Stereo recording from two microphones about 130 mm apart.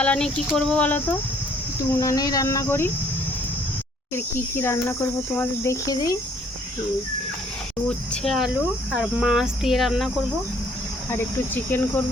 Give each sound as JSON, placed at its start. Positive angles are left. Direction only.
{"t": 0.0, "sound": "speech", "side_deg": 5}
{"t": 2.0, "sound": "cricket", "side_deg": 25}
{"t": 4.5, "sound": "cricket", "side_deg": 20}
{"t": 7.9, "sound": "speech", "side_deg": 5}
{"t": 11.1, "sound": "speech", "side_deg": 15}